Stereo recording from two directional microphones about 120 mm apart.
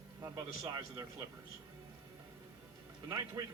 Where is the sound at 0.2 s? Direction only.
30° right (ahead or behind).